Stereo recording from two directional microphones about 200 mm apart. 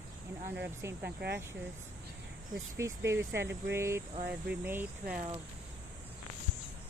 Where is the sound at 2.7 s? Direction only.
15° right (ahead or behind).